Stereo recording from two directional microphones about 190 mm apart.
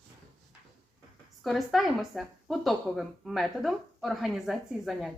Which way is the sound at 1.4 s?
Centre (ahead or behind).